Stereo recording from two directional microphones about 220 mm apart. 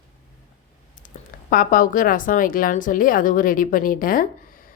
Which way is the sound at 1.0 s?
40° left (ahead or behind).